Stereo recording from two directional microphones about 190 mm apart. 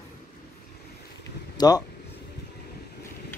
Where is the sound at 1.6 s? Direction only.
20° left (ahead or behind).